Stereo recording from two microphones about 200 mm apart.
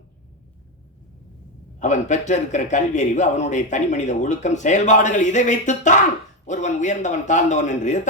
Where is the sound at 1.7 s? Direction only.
35° left (ahead or behind).